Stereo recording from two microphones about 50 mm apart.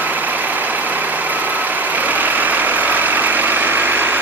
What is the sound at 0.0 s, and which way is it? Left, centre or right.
Vehicle, right.